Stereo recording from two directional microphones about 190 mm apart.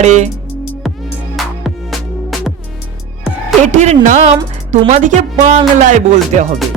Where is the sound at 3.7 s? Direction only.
40° right (ahead or behind).